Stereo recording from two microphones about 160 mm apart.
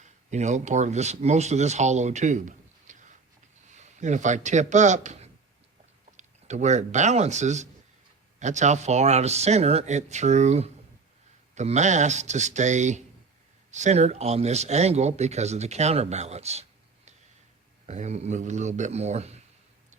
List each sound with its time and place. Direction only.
0.0 s a man's voice: 45° right (ahead or behind)
17.8 s speech: 45° right (ahead or behind)